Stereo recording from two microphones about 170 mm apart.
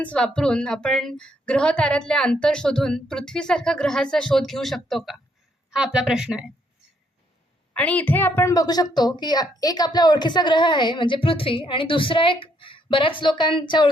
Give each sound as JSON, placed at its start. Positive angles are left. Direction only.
{"t": 0.0, "sound": "a woman's voice", "side_deg": 5}
{"t": 7.7, "sound": "a woman's voice", "side_deg": 10}